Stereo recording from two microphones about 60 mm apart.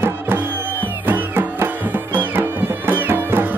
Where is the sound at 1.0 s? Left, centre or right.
Right.